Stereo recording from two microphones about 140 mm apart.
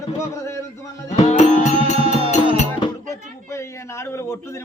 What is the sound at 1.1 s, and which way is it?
Music, 55° left (ahead or behind).